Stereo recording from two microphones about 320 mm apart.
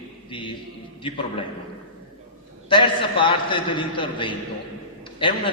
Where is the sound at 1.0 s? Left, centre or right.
Centre.